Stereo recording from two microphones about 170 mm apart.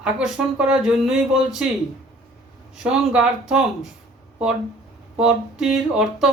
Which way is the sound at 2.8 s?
5° right (ahead or behind).